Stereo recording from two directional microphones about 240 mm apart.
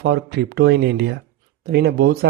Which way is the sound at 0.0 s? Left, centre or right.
Right.